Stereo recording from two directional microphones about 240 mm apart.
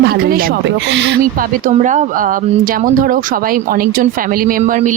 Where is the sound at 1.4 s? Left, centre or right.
Right.